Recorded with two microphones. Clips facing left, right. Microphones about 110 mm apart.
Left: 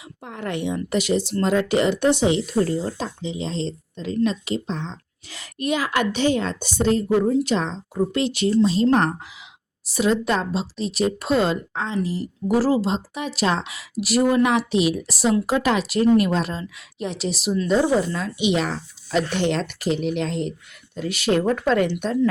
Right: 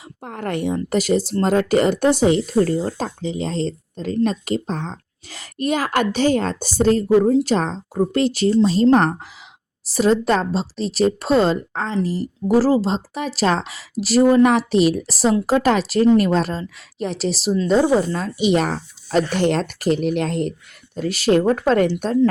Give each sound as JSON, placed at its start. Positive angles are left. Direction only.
{"t": 0.2, "sound": "speech", "side_deg": -45}
{"t": 20.9, "sound": "speech", "side_deg": -40}